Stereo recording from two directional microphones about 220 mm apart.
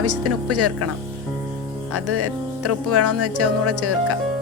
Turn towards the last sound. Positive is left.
turn(degrees=-90)